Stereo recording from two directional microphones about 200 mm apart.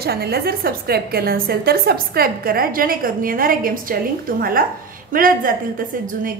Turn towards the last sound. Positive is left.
turn(degrees=-45)  # may be behind; listen again after turning